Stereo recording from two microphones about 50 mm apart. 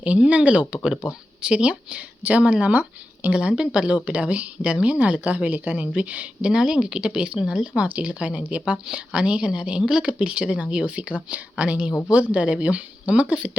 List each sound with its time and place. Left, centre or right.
0.3 s a woman's voice: right
2.7 s speech: right
3.3 s a woman's voice: right